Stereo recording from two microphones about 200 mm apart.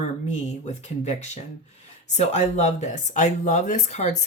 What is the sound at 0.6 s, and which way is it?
Speech, 35° left (ahead or behind).